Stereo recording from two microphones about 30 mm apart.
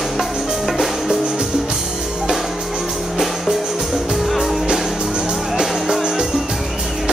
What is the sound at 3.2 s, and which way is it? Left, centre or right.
Music, centre.